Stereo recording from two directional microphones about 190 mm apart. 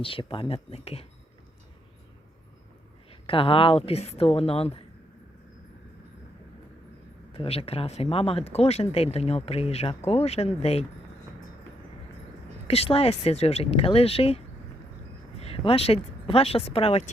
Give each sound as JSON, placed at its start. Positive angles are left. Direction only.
{"t": 0.0, "sound": "speech", "side_deg": 30}
{"t": 3.1, "sound": "speech", "side_deg": 30}
{"t": 7.3, "sound": "speech", "side_deg": 30}
{"t": 12.6, "sound": "speech", "side_deg": 30}